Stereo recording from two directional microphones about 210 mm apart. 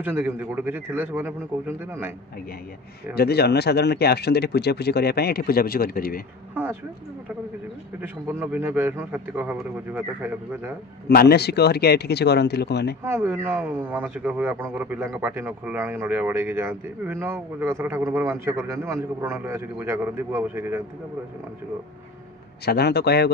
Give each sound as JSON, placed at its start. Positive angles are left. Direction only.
{"t": 0.0, "sound": "speech", "side_deg": -10}
{"t": 3.2, "sound": "speech", "side_deg": 50}
{"t": 8.0, "sound": "speech", "side_deg": -10}
{"t": 11.1, "sound": "speech", "side_deg": 50}
{"t": 13.0, "sound": "speech", "side_deg": -10}
{"t": 22.7, "sound": "speech", "side_deg": 50}